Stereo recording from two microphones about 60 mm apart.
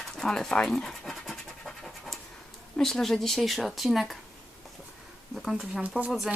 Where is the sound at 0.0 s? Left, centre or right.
Centre.